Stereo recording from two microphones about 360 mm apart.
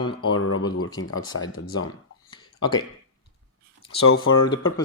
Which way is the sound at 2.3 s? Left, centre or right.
Centre.